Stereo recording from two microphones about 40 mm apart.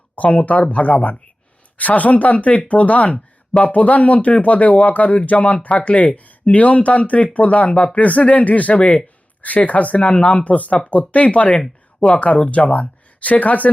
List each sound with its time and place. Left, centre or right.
0.2 s speech: left